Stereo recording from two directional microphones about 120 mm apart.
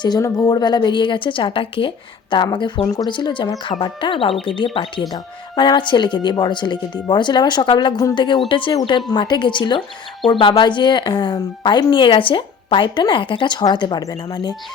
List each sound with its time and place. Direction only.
0.0 s speech: 35° left (ahead or behind)